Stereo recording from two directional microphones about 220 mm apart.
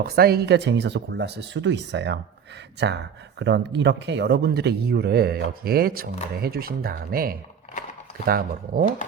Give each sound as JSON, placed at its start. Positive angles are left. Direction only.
{"t": 0.0, "sound": "speech", "side_deg": -45}